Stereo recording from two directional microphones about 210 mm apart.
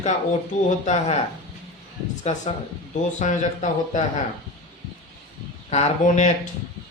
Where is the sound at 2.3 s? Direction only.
30° left (ahead or behind).